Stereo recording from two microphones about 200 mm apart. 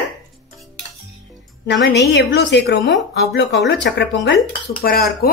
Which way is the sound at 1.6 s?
60° left (ahead or behind).